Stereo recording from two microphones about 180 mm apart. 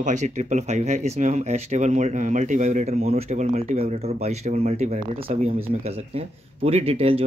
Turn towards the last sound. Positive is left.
turn(degrees=-30)  # may be behind; listen again after turning